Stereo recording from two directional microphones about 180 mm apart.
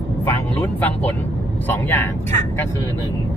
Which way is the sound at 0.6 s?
10° left (ahead or behind).